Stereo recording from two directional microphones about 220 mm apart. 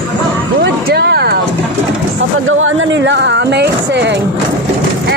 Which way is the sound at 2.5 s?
65° right (ahead or behind).